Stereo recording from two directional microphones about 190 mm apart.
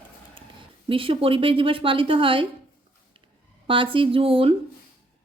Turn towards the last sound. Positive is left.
turn(degrees=-30)  # may be behind; listen again after turning